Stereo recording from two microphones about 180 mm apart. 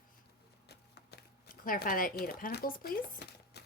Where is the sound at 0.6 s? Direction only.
65° left (ahead or behind).